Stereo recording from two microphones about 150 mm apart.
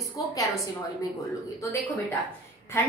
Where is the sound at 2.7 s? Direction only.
15° left (ahead or behind).